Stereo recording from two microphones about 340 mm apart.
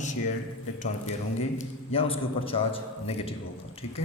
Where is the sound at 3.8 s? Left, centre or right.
Left.